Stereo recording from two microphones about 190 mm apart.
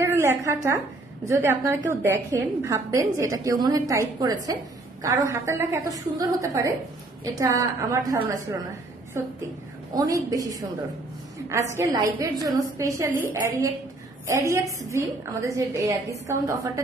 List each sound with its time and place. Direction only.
0.0 s a woman's voice: 15° right (ahead or behind)
11.7 s a woman's voice: 15° right (ahead or behind)